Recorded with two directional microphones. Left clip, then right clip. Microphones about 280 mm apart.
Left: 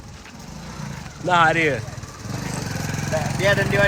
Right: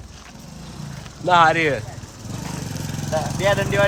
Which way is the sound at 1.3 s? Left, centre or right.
Centre.